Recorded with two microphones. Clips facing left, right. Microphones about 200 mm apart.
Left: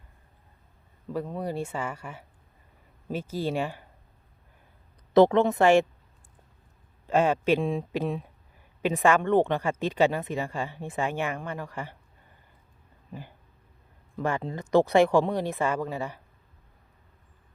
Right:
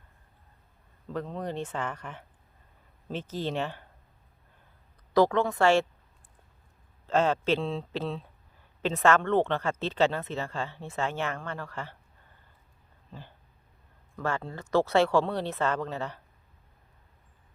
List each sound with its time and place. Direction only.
1.1 s speech: 10° left (ahead or behind)
5.1 s speech: 20° left (ahead or behind)
7.1 s speech: 15° left (ahead or behind)
13.1 s dog: 15° left (ahead or behind)
14.2 s speech: 15° left (ahead or behind)